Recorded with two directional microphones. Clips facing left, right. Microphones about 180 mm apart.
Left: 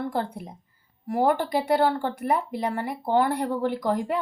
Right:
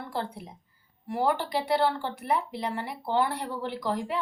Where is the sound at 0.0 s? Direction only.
50° left (ahead or behind).